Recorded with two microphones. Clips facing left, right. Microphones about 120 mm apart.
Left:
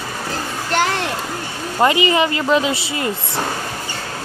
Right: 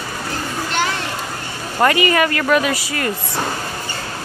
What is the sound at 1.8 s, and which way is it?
Speech, 20° left (ahead or behind).